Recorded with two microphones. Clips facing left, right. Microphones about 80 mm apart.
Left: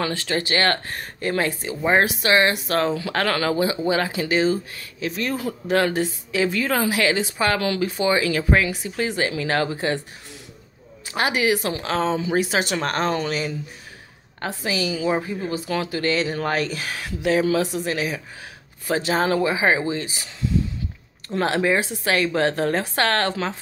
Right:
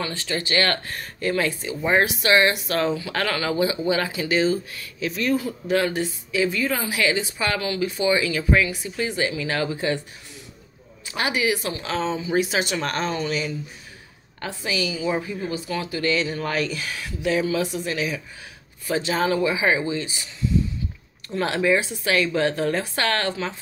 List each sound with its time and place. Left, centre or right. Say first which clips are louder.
0.0 s a woman's voice: left 4 dB; left
0.5 s a woman's voice: even; left
7.3 s speech: left 4 dB; left
7.6 s speech: left 2 dB; left
7.9 s speech: right 1 dB; left
11.1 s a woman's voice: left 3 dB; left
14.4 s speech: left 2 dB; left
15.6 s a woman's voice: left 3 dB; left
16.0 s speech: right 1 dB; left
19.1 s speech: left 1 dB; left
21.4 s speech: left 1 dB; left